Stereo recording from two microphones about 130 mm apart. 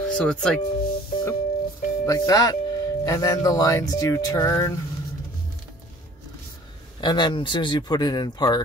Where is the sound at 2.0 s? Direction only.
25° left (ahead or behind).